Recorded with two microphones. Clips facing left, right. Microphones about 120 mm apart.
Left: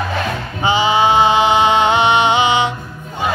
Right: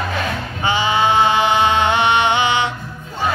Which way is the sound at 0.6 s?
15° left (ahead or behind).